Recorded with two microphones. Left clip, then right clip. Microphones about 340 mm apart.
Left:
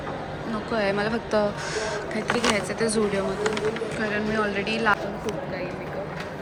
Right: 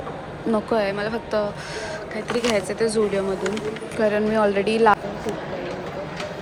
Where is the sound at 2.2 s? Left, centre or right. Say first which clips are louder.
Even; centre.